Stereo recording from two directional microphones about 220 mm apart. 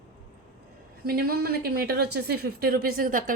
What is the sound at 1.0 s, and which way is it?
A woman's voice, 45° right (ahead or behind).